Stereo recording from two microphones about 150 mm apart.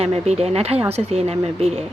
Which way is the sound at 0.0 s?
45° right (ahead or behind).